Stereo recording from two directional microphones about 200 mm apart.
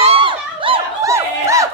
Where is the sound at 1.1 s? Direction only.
15° right (ahead or behind).